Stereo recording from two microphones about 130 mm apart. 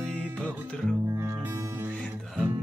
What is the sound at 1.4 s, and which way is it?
Music, 20° right (ahead or behind).